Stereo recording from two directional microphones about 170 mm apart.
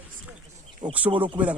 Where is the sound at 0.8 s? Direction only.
25° right (ahead or behind).